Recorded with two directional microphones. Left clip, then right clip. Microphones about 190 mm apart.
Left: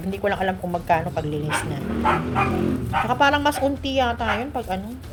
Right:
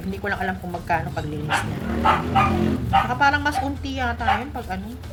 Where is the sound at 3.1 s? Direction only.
35° left (ahead or behind).